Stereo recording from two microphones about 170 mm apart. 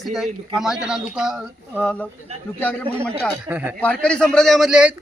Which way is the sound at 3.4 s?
10° right (ahead or behind).